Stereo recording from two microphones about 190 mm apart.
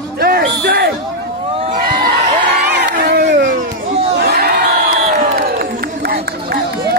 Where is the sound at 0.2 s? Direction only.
55° right (ahead or behind).